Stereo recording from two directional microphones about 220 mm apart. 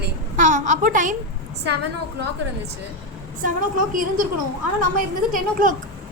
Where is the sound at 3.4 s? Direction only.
40° right (ahead or behind).